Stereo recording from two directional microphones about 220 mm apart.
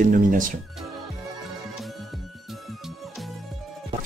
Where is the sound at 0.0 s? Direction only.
40° right (ahead or behind).